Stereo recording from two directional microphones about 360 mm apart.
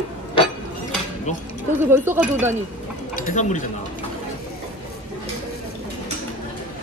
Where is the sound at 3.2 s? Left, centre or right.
Left.